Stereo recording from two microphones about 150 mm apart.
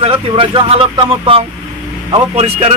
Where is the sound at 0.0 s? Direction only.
40° right (ahead or behind).